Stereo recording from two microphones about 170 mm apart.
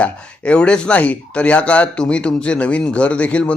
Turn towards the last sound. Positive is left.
turn(degrees=5)  # may be behind; listen again after turning